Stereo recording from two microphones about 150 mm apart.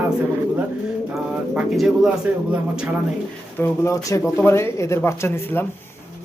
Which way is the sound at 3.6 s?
20° left (ahead or behind).